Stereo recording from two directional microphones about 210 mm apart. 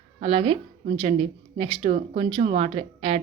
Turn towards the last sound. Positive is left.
turn(degrees=-25)  # may be behind; listen again after turning